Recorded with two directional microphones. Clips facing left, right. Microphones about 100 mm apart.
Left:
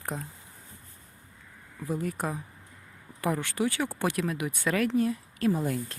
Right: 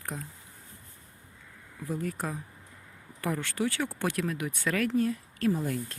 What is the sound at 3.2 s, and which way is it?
Speech, 15° left (ahead or behind).